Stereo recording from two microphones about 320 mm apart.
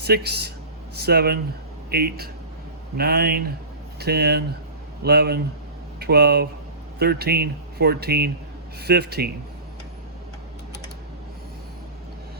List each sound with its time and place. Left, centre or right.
0.0 s speech: right